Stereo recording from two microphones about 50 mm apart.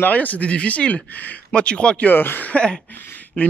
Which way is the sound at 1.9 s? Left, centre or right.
Left.